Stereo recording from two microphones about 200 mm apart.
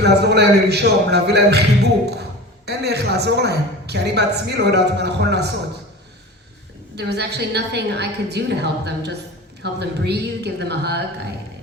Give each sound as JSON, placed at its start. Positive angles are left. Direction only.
{"t": 0.0, "sound": "a man's voice", "side_deg": -55}
{"t": 6.9, "sound": "a man's voice", "side_deg": -55}